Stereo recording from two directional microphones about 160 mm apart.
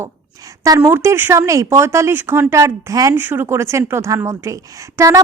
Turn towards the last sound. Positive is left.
turn(degrees=-20)  # may be behind; listen again after turning